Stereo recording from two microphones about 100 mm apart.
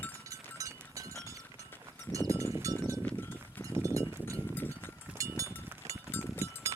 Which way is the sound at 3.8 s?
30° right (ahead or behind).